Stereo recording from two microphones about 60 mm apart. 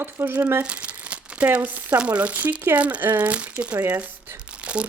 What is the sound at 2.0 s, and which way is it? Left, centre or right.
Speech, right.